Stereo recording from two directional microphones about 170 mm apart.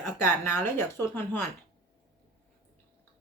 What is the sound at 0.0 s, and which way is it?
Speech, 15° left (ahead or behind).